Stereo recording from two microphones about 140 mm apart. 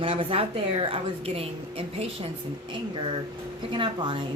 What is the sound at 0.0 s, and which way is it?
Speech, 40° right (ahead or behind).